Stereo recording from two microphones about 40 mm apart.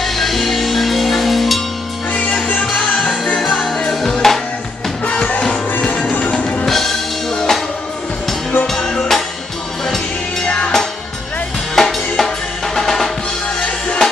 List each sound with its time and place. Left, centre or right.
0.0 s music: centre
2.6 s music: centre
5.0 s music: left
6.6 s music: centre
8.6 s music: centre
10.4 s music: left
11.7 s drum: centre
13.6 s music: left